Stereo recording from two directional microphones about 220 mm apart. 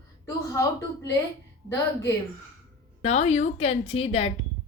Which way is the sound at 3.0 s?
30° left (ahead or behind).